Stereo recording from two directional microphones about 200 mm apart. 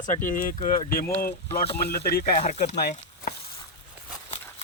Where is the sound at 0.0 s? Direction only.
40° left (ahead or behind).